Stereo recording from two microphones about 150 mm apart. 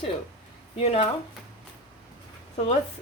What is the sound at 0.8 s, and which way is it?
Speech, 40° left (ahead or behind).